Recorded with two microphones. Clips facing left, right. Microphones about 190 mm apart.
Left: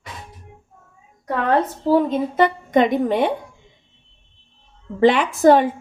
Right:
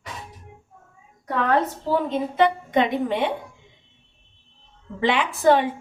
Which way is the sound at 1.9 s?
45° left (ahead or behind).